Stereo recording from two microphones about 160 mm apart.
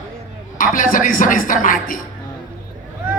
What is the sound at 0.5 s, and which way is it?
Speech, 55° left (ahead or behind).